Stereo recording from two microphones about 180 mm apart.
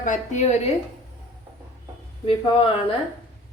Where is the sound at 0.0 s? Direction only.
45° left (ahead or behind).